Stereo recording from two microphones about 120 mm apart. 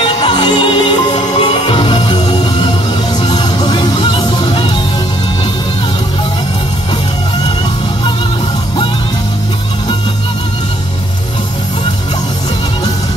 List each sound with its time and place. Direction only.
0.2 s music: 40° left (ahead or behind)